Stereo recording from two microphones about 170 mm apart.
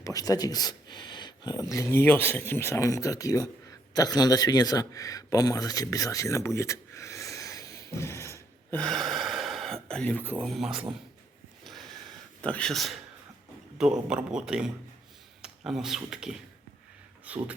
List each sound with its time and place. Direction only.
0.0 s speech: 20° left (ahead or behind)
8.8 s a man's voice: 5° left (ahead or behind)
11.6 s a sound: centre (ahead or behind)
12.4 s a man's voice: 5° left (ahead or behind)